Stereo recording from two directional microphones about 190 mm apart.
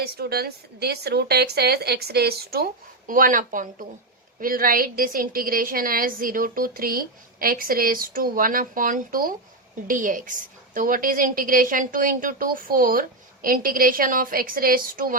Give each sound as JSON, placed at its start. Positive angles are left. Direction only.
{"t": 0.0, "sound": "a woman's voice", "side_deg": -55}